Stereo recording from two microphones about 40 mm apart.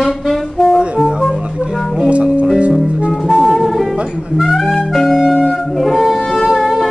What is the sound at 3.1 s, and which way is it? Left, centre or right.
Music, centre.